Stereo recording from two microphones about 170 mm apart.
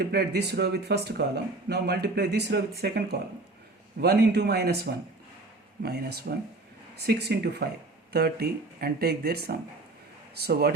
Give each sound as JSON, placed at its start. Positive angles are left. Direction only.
{"t": 0.0, "sound": "speech", "side_deg": -65}
{"t": 8.1, "sound": "speech", "side_deg": -65}